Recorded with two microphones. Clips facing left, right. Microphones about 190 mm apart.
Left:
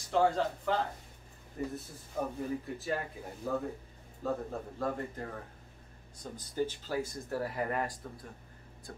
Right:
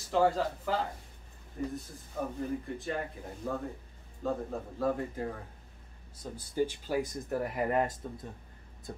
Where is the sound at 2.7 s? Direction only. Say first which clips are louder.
Even; 5° left (ahead or behind).